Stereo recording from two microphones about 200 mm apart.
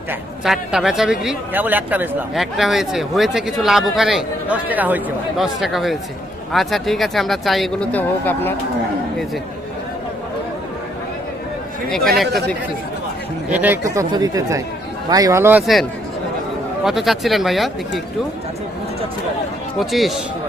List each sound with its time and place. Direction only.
0.1 s speech: centre (ahead or behind)
11.9 s speech: centre (ahead or behind)
13.5 s speech: 10° right (ahead or behind)
19.8 s speech: centre (ahead or behind)